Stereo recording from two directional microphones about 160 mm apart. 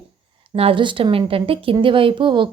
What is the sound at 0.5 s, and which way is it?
A woman's voice, 35° right (ahead or behind).